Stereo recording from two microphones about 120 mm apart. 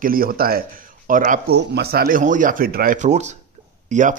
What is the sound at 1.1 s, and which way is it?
A man's voice, 90° right.